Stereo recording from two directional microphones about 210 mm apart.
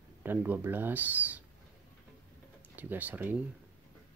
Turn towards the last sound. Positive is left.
turn(degrees=-10)  # may be behind; listen again after turning